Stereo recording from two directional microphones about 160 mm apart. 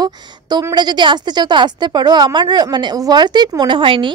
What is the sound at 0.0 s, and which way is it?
A woman's voice, 25° right (ahead or behind).